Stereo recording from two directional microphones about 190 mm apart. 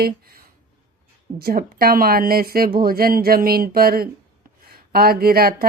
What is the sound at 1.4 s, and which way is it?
Speech, 50° right (ahead or behind).